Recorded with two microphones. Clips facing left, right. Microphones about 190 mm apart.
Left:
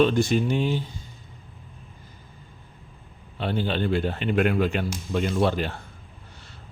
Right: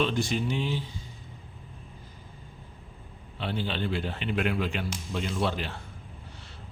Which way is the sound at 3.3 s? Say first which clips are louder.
Left 6 dB; 50° left (ahead or behind).